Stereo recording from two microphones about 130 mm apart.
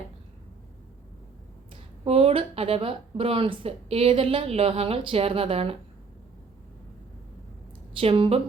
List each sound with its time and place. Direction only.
2.0 s speech: 50° right (ahead or behind)
7.9 s speech: 40° right (ahead or behind)